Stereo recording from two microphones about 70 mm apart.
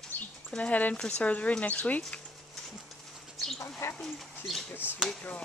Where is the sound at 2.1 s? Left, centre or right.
Centre.